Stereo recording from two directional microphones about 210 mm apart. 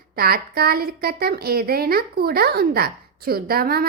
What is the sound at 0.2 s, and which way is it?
A child's voice, 45° right (ahead or behind).